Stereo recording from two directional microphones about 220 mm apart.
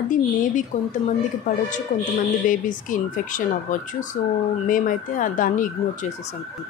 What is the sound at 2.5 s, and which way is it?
A woman's voice, 35° left (ahead or behind).